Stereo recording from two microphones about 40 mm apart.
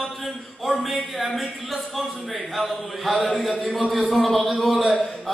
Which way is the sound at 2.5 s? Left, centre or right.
Centre.